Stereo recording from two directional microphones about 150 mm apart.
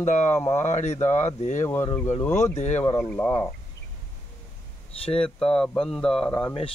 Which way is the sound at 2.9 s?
15° left (ahead or behind).